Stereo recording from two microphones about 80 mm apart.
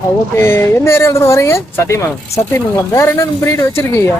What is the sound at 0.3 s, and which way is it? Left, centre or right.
Speech, left.